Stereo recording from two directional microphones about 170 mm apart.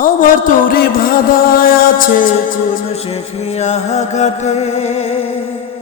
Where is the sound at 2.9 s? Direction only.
35° left (ahead or behind).